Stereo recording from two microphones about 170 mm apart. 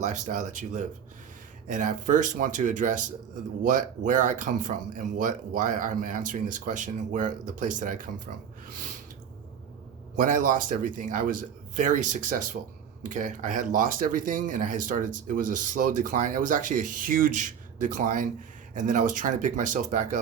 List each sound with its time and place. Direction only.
0.0 s speech: 45° right (ahead or behind)
10.2 s speech: 50° right (ahead or behind)